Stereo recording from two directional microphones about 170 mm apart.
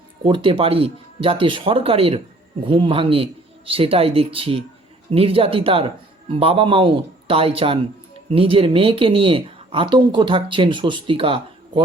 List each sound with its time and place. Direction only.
0.2 s speech: 30° right (ahead or behind)